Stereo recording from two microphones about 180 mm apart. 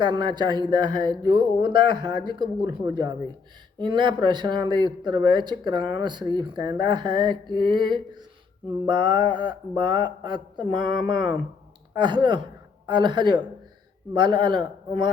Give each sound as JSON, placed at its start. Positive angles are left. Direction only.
{"t": 0.0, "sound": "speech", "side_deg": -25}